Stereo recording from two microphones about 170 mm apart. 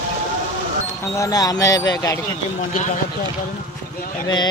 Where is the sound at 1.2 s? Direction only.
20° left (ahead or behind).